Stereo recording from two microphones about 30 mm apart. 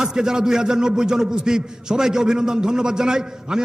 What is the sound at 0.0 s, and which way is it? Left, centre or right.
A man's voice, right.